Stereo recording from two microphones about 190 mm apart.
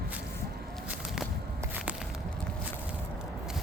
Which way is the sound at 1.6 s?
5° right (ahead or behind).